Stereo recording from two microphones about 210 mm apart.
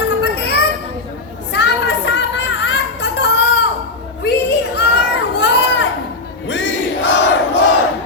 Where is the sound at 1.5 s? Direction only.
55° left (ahead or behind).